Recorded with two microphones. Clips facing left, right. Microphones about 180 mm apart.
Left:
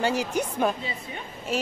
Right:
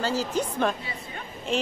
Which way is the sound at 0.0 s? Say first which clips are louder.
Left 1 dB; 15° left (ahead or behind).